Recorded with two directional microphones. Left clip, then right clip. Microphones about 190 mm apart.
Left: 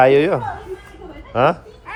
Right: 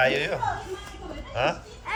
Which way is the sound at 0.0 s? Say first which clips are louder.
Left 11 dB; 30° left (ahead or behind).